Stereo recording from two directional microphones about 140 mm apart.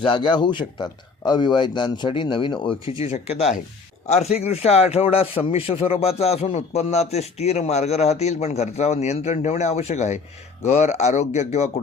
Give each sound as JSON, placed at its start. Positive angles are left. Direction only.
{"t": 0.0, "sound": "speech", "side_deg": 35}
{"t": 3.0, "sound": "a man's voice", "side_deg": 50}